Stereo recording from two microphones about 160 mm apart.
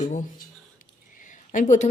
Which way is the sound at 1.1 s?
55° left (ahead or behind).